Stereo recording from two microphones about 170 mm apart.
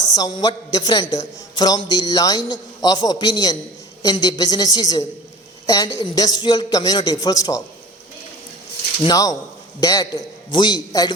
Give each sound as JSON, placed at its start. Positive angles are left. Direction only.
{"t": 0.2, "sound": "a man's voice", "side_deg": 20}
{"t": 9.0, "sound": "a man's voice", "side_deg": 20}